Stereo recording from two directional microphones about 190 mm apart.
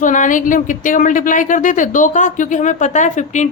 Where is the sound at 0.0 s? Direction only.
40° left (ahead or behind).